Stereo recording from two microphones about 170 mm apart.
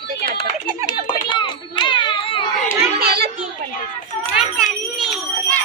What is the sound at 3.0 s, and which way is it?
Speech, 65° right (ahead or behind).